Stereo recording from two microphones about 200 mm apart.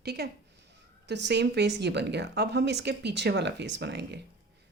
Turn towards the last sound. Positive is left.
turn(degrees=-60)  # may be behind; listen again after turning